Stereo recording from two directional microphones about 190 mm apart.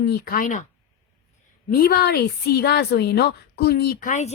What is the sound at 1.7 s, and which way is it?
A woman's voice, 55° left (ahead or behind).